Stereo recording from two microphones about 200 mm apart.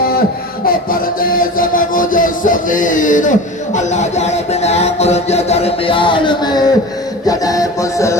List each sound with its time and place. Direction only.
0.6 s music: 45° left (ahead or behind); by 8.2 s 15° left (ahead or behind)